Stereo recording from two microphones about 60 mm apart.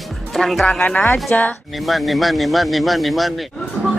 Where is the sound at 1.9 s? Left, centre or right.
Centre.